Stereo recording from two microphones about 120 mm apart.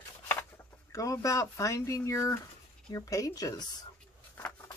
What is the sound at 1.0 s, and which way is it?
Speech, 25° left (ahead or behind).